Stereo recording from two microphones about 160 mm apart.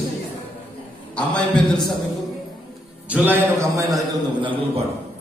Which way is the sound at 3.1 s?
10° right (ahead or behind).